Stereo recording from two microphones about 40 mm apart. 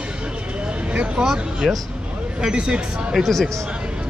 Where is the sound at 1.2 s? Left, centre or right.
Centre.